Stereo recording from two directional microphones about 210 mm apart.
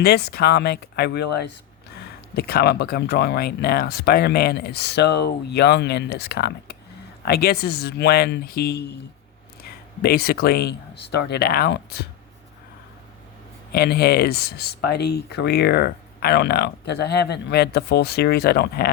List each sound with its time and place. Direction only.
0.0 s speech: 50° left (ahead or behind)
13.7 s speech: 45° left (ahead or behind)